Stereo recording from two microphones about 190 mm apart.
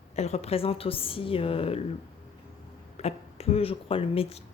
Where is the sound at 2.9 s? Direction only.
35° left (ahead or behind).